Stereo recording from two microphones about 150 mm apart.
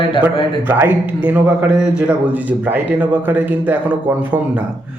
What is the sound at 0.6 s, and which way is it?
A man's voice, 15° right (ahead or behind).